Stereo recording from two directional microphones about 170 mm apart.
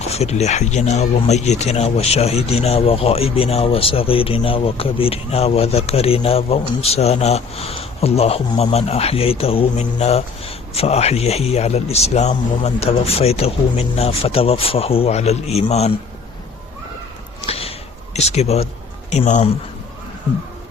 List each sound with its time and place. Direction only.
0.0 s speech: 40° left (ahead or behind)
17.4 s a sound: 35° left (ahead or behind)
19.1 s speech: 45° left (ahead or behind)